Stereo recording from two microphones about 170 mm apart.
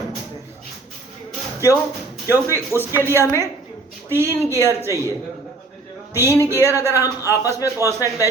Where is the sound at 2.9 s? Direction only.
15° right (ahead or behind).